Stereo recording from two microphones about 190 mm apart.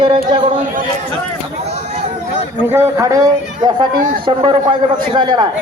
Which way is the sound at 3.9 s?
45° right (ahead or behind).